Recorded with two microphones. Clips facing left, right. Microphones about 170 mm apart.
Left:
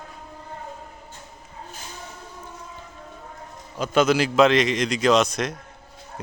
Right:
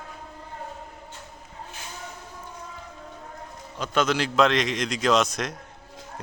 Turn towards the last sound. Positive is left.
turn(degrees=0)  # may be behind; listen again after turning